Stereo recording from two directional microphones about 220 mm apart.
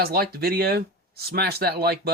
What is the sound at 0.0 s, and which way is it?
Speech, 45° right (ahead or behind).